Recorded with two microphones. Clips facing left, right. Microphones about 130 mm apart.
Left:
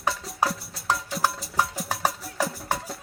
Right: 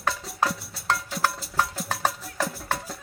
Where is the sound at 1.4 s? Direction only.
10° left (ahead or behind).